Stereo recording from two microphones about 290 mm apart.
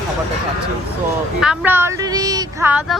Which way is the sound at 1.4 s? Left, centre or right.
Centre.